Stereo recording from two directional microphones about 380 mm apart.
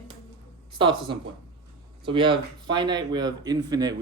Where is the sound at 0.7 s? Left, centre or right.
Centre.